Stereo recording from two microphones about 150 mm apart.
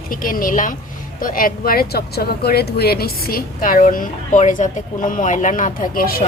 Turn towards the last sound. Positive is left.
turn(degrees=75)  # may be behind; listen again after turning